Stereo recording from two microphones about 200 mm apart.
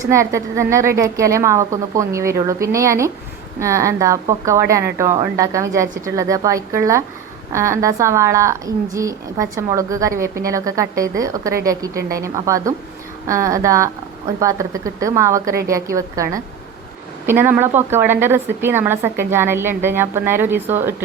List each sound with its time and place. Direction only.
0.1 s a woman's voice: 15° right (ahead or behind)